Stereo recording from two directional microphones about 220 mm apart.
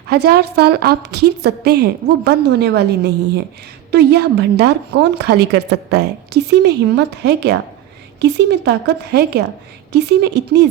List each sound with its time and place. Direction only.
0.1 s a woman's voice: 50° right (ahead or behind)